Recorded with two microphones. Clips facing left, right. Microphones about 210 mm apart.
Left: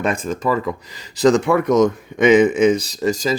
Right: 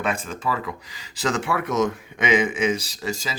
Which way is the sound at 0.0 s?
40° left (ahead or behind).